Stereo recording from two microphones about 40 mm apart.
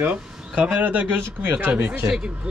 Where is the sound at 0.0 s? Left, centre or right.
Right.